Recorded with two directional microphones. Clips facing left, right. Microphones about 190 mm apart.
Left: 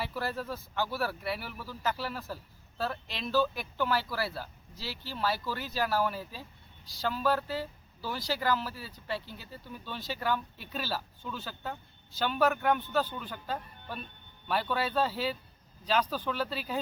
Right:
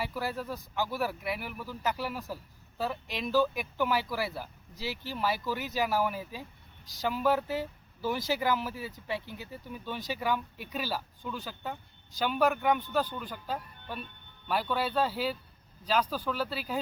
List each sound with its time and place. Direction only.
0.0 s speech: 10° right (ahead or behind)